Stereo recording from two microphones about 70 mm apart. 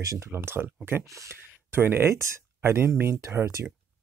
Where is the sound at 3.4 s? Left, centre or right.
Right.